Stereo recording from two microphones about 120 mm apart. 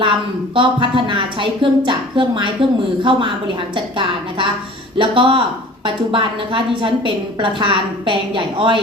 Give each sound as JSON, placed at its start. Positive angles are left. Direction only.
{"t": 0.5, "sound": "a woman's voice", "side_deg": -45}